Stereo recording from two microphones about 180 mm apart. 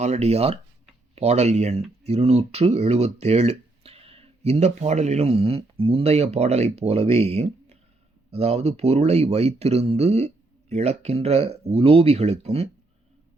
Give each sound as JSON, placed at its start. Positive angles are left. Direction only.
{"t": 0.0, "sound": "speech", "side_deg": -35}